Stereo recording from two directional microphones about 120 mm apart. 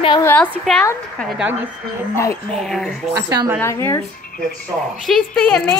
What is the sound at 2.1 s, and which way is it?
Speech, 20° left (ahead or behind).